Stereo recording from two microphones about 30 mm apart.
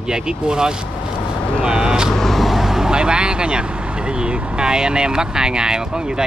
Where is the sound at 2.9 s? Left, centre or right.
Right.